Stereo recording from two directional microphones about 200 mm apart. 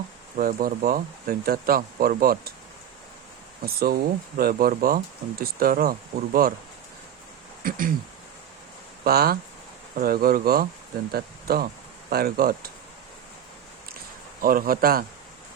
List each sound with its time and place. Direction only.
0.3 s speech: 45° right (ahead or behind)
3.7 s speech: 50° right (ahead or behind)
7.6 s a sound: 45° right (ahead or behind)
9.0 s speech: 50° right (ahead or behind)
14.4 s speech: 45° right (ahead or behind)